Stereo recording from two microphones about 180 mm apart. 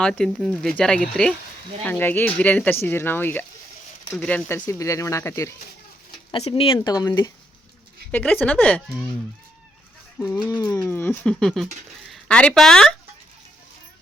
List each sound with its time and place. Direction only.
0.0 s speech: 5° left (ahead or behind)
6.3 s speech: 30° left (ahead or behind)
8.1 s speech: 10° left (ahead or behind)
10.2 s speech: 10° left (ahead or behind)